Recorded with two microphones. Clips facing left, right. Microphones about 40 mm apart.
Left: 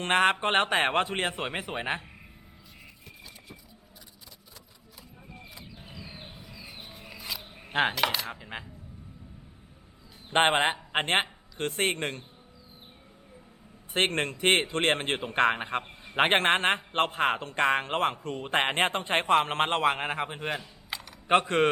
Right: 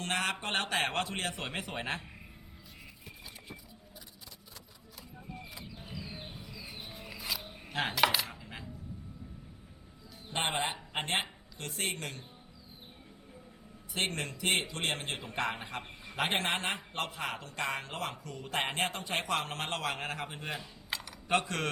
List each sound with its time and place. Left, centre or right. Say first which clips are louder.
0.0 s a man's voice: left 10 dB; left
5.3 s a sound: right 1 dB; centre
7.7 s coin: left 8 dB; left
7.9 s cutlery: even; centre
8.3 s coin: left 7 dB; left
10.3 s a man's voice: left 10 dB; left
13.9 s a man's voice: left 8 dB; left
20.6 s coin: left 1 dB; centre
21.2 s a man's voice: left 8 dB; left